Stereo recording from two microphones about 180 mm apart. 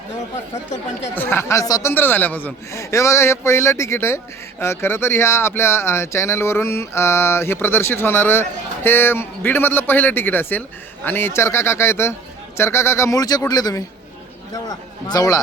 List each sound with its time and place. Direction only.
1.1 s a man's voice: 10° left (ahead or behind)